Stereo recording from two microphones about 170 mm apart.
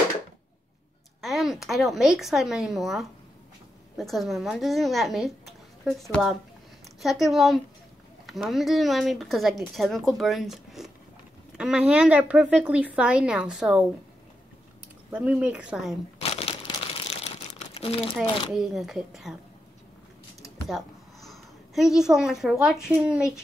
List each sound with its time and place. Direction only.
1.2 s a woman's voice: centre (ahead or behind)
15.0 s a woman's voice: 10° right (ahead or behind)
16.2 s crumpling: 35° left (ahead or behind)
17.7 s speech: 35° left (ahead or behind)
18.5 s speech: centre (ahead or behind)
20.6 s a woman's voice: centre (ahead or behind)